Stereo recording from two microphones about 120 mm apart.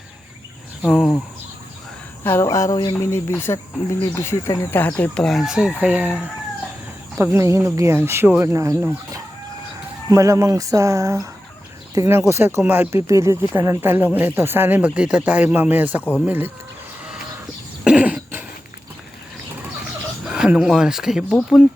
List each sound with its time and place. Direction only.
0.9 s speech: centre (ahead or behind)
2.2 s speech: 20° left (ahead or behind); by 6.1 s 10° right (ahead or behind)
7.2 s speech: 25° right (ahead or behind)
10.1 s speech: 25° right (ahead or behind)
17.8 s cough: 10° right (ahead or behind)
20.3 s speech: 5° right (ahead or behind)